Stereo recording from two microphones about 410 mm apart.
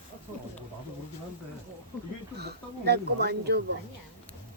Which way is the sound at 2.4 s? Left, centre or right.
Right.